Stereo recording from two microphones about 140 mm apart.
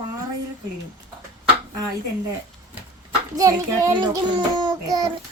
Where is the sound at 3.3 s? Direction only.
25° right (ahead or behind).